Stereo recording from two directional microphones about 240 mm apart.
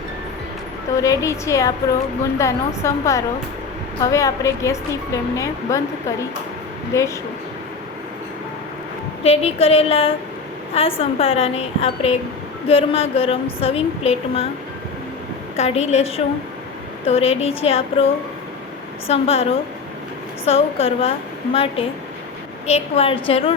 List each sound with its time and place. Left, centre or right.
0.9 s a woman's voice: centre
6.9 s a woman's voice: centre
9.2 s a woman's voice: left
15.5 s a woman's voice: left